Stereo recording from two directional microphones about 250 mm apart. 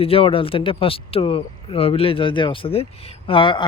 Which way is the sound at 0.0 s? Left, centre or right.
Left.